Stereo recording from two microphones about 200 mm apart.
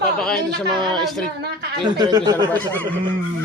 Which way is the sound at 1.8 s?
20° right (ahead or behind).